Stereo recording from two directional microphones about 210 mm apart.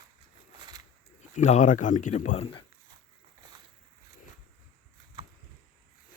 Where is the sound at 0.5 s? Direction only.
20° right (ahead or behind).